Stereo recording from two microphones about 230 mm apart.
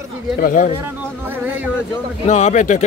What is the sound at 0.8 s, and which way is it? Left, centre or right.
Music, centre.